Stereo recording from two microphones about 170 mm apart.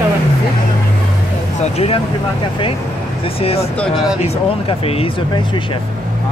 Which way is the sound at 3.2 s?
35° left (ahead or behind).